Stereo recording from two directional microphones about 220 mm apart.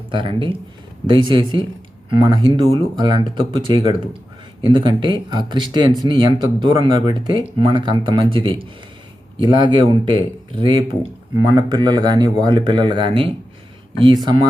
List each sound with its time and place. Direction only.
0.1 s speech: 20° right (ahead or behind)